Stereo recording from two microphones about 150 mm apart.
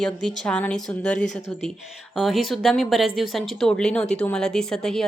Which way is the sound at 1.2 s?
55° left (ahead or behind).